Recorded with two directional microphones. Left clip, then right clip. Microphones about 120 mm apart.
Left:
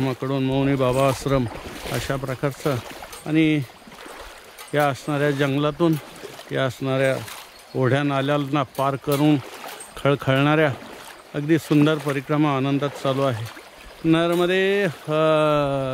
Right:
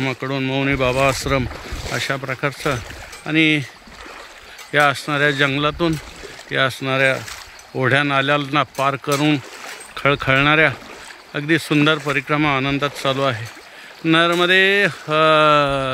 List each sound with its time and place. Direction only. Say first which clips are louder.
0.0 s speech: right 2 dB; 25° left (ahead or behind)
2.1 s speech: right 3 dB; 15° left (ahead or behind)
4.7 s speech: right 5 dB; 15° left (ahead or behind)
14.0 s speech: right 4 dB; 5° left (ahead or behind)